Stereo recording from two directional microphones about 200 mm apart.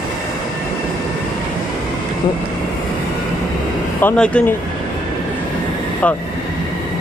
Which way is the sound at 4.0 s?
5° left (ahead or behind).